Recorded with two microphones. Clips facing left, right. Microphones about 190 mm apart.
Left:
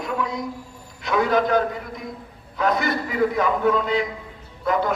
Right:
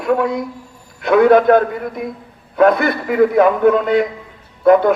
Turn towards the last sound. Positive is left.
turn(degrees=-55)  # may be behind; listen again after turning